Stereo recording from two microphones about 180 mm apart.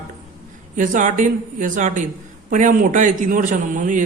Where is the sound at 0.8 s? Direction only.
45° right (ahead or behind).